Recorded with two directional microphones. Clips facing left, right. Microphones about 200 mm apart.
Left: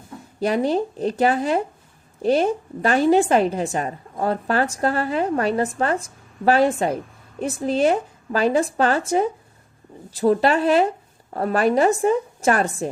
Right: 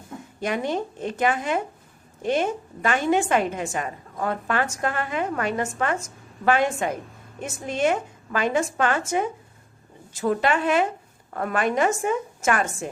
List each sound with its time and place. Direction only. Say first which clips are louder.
0.3 s a woman's voice: left 6 dB; 35° left (ahead or behind)